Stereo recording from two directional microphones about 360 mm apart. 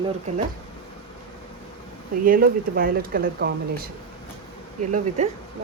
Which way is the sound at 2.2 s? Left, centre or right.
Right.